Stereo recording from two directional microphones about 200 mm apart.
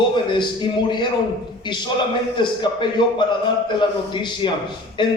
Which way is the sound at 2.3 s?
25° left (ahead or behind).